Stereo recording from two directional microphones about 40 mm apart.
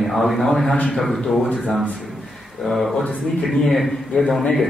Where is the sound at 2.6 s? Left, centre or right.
Centre.